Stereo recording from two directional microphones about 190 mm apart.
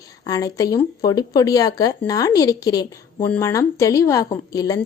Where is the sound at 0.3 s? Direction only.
20° left (ahead or behind).